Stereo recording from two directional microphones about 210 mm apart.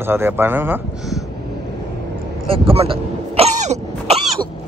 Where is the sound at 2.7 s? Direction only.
25° right (ahead or behind).